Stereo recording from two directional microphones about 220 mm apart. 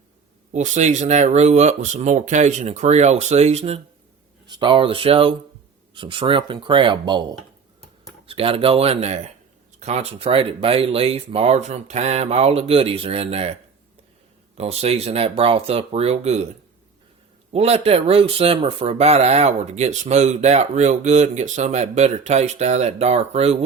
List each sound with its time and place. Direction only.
0.5 s speech: 30° right (ahead or behind)
14.6 s speech: 30° right (ahead or behind)
17.5 s speech: 25° right (ahead or behind)